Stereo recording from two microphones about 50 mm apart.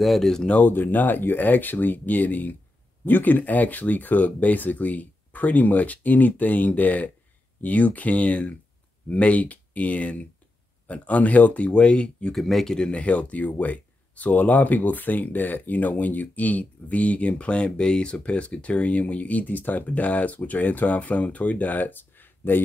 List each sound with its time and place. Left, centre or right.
0.0 s speech: centre
0.7 s speech: left
12.4 s speech: centre; by 22.6 s left